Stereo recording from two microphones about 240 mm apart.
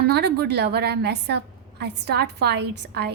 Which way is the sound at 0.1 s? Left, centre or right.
Right.